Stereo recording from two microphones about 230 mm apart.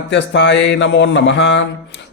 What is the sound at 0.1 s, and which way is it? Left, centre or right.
Speech, left.